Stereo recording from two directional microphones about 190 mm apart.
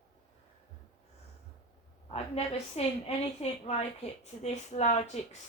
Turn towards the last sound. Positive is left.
turn(degrees=35)  # may be behind; listen again after turning